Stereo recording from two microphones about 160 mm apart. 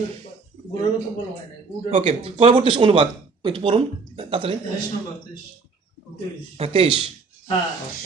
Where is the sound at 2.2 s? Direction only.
35° right (ahead or behind).